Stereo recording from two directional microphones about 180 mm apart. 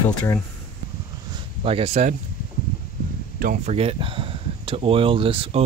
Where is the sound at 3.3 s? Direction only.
50° right (ahead or behind).